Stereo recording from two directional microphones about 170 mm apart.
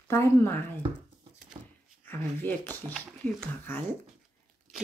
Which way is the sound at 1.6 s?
20° right (ahead or behind).